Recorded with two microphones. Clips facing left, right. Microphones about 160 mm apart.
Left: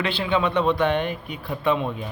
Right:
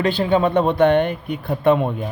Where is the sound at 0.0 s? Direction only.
45° right (ahead or behind).